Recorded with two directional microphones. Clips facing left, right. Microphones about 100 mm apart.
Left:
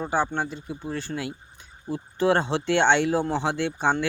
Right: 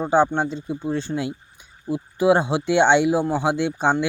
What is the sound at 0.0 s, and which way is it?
Speech, 20° right (ahead or behind).